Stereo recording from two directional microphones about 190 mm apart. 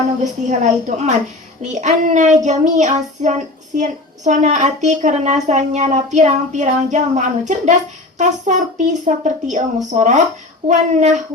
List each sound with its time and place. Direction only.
0.4 s child singing: 40° right (ahead or behind)